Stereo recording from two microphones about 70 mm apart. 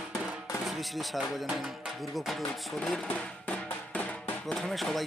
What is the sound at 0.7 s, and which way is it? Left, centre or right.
Music, centre.